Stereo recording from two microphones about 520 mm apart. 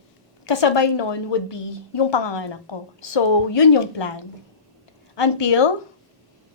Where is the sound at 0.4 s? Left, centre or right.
Left.